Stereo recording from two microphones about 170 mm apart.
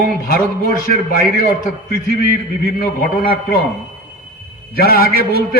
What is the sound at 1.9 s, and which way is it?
A man's voice, 60° left (ahead or behind).